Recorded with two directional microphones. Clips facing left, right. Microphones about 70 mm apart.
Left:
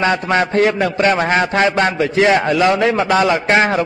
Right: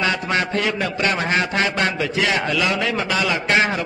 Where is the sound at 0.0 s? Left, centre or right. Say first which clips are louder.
Left 6 dB; left.